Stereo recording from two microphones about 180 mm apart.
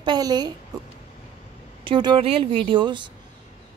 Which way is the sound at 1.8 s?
25° right (ahead or behind).